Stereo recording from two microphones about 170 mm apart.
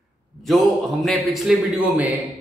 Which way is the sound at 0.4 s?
Centre (ahead or behind).